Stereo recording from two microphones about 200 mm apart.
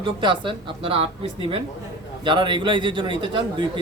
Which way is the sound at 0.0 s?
25° right (ahead or behind).